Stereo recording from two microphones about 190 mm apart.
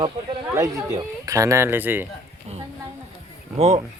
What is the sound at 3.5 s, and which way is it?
Speech, 35° right (ahead or behind).